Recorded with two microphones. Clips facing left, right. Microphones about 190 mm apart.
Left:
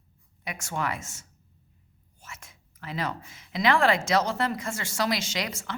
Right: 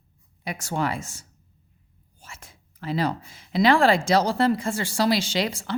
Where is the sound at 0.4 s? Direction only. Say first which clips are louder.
Right 5 dB; 35° right (ahead or behind).